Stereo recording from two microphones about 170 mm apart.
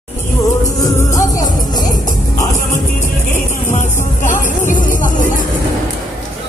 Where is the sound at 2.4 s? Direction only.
45° left (ahead or behind).